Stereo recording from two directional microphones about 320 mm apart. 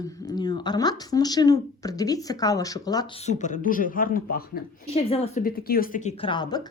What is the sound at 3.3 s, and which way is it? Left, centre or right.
A woman's voice, left.